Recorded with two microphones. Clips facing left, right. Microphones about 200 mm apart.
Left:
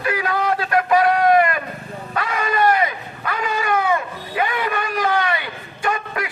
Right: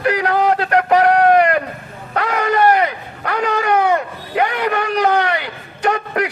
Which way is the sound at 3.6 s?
50° right (ahead or behind).